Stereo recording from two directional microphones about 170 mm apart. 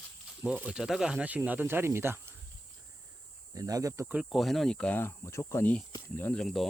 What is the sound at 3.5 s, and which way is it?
Speech, 20° right (ahead or behind).